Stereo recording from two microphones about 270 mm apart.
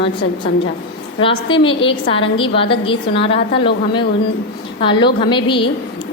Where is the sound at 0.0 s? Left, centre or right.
Left.